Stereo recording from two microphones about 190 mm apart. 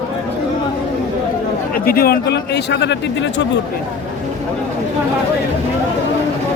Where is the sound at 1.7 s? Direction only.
50° left (ahead or behind); by 3.6 s 70° left (ahead or behind).